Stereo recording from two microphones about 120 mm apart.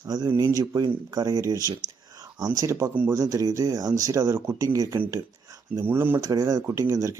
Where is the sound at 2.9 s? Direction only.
15° right (ahead or behind).